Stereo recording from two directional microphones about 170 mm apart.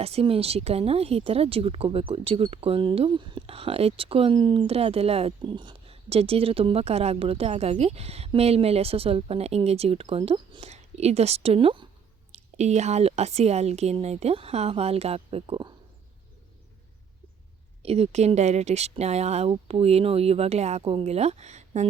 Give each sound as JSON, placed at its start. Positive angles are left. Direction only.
{"t": 0.0, "sound": "speech", "side_deg": -35}
{"t": 12.3, "sound": "speech", "side_deg": -40}
{"t": 17.8, "sound": "speech", "side_deg": -35}